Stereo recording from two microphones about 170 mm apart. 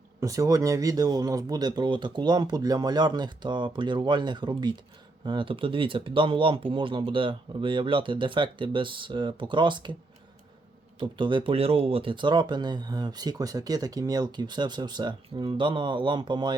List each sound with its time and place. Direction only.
0.2 s speech: 20° right (ahead or behind)
11.0 s speech: 30° right (ahead or behind)